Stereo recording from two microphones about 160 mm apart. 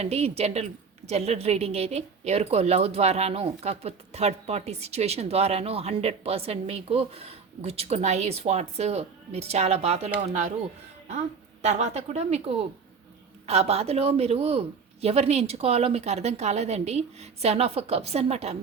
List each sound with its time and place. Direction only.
0.0 s a woman's voice: 40° right (ahead or behind)
11.6 s a woman's voice: 45° right (ahead or behind)